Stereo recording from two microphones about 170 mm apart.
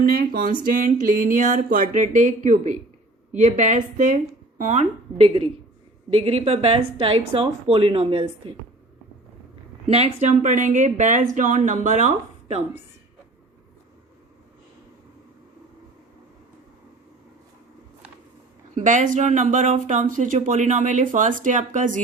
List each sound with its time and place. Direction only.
0.0 s a woman's voice: 60° right (ahead or behind); by 8.5 s 35° right (ahead or behind)
9.8 s speech: 40° right (ahead or behind)
18.7 s speech: 45° right (ahead or behind)